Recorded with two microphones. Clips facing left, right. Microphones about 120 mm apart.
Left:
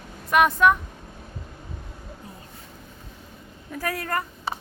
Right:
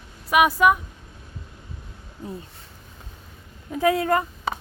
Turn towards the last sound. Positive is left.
turn(degrees=-20)  # may be behind; listen again after turning